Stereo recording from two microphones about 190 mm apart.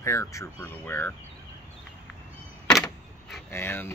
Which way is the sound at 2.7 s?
Centre (ahead or behind).